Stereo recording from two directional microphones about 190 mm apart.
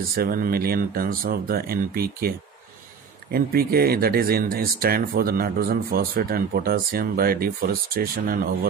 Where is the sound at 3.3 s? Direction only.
50° right (ahead or behind).